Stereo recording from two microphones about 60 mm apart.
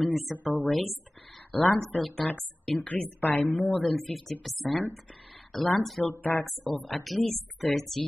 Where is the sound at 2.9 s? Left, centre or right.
Left.